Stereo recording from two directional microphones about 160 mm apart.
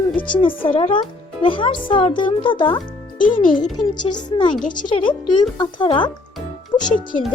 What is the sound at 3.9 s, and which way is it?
Speech, 25° left (ahead or behind).